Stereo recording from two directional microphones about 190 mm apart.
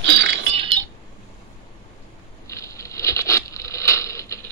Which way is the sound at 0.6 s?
25° right (ahead or behind).